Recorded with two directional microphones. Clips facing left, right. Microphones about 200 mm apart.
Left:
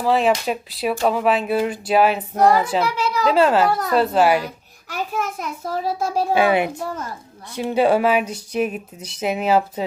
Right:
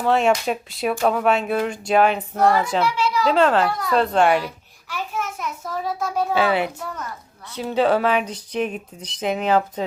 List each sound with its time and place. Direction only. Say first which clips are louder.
0.0 s speech: even; centre (ahead or behind)
2.8 s a sound: right 1 dB; 40° left (ahead or behind)
3.2 s speech: left 2 dB; 5° left (ahead or behind)
4.4 s a child's voice: even; 40° left (ahead or behind)
6.3 s speech: left 3 dB; 15° left (ahead or behind)
6.7 s a woman's voice: left 4 dB; 30° left (ahead or behind)
7.7 s speech: left 2 dB; 10° left (ahead or behind)